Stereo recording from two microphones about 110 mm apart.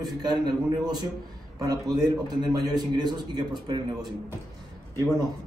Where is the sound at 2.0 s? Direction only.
35° right (ahead or behind).